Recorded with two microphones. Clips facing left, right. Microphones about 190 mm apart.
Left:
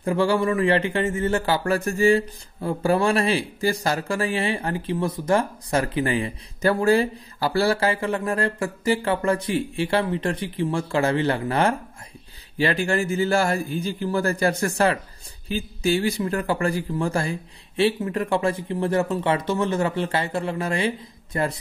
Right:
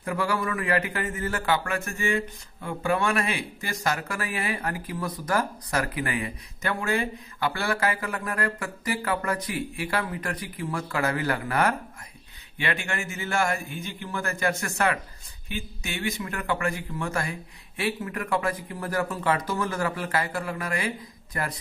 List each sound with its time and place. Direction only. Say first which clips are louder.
0.0 s a man's voice: left 7 dB; 30° left (ahead or behind)